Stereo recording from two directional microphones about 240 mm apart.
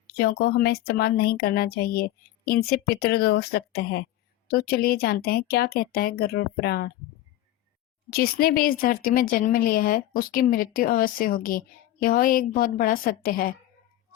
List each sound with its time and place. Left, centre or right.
0.1 s speech: left
8.1 s speech: left